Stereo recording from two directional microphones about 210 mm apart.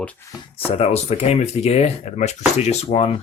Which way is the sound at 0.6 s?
30° left (ahead or behind).